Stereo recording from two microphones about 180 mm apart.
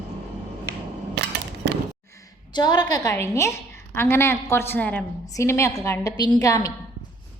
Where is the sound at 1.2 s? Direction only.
70° right (ahead or behind).